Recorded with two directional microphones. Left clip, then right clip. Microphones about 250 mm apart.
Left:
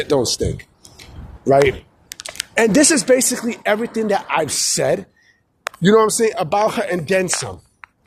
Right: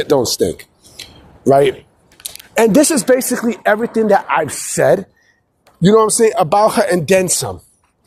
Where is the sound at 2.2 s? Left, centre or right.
Right.